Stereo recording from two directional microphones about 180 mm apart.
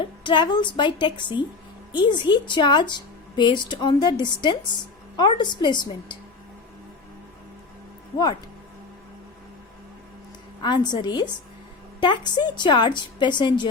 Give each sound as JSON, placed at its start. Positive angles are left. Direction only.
{"t": 0.0, "sound": "a woman's voice", "side_deg": 25}
{"t": 10.6, "sound": "a woman's voice", "side_deg": 25}